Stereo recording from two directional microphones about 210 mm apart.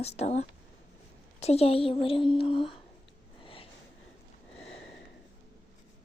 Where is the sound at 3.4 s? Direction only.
25° left (ahead or behind).